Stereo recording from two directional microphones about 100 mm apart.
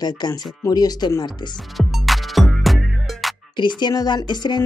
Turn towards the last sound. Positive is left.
turn(degrees=50)  # may be behind; listen again after turning